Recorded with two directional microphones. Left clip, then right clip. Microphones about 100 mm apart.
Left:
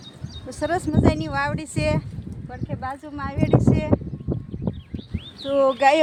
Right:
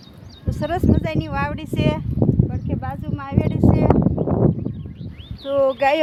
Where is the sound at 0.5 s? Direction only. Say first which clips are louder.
Right 2 dB; centre (ahead or behind).